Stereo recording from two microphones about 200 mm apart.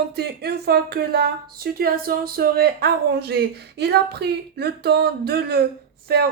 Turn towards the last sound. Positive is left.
turn(degrees=-55)  # may be behind; listen again after turning